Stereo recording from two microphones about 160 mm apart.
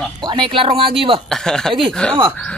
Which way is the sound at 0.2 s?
30° right (ahead or behind).